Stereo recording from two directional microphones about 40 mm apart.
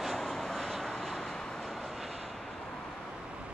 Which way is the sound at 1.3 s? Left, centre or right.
Centre.